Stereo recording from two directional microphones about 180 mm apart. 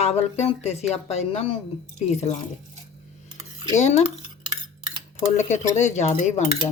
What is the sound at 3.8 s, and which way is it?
Speech, 40° left (ahead or behind).